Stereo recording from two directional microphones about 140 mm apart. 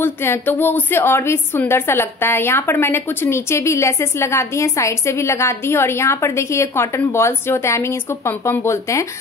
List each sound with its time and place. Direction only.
0.0 s a woman's voice: 15° left (ahead or behind)